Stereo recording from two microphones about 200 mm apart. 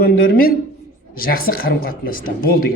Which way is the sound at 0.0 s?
45° left (ahead or behind).